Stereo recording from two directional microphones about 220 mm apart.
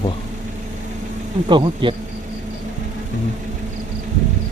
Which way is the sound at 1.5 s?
20° right (ahead or behind).